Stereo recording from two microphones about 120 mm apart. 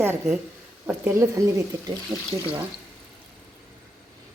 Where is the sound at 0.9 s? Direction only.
20° right (ahead or behind).